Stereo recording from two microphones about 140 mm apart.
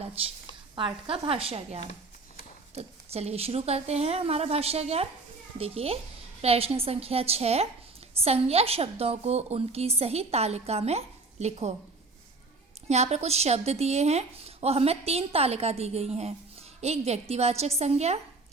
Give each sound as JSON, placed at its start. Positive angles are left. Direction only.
{"t": 0.8, "sound": "a woman's voice", "side_deg": -35}
{"t": 12.9, "sound": "a woman's voice", "side_deg": -50}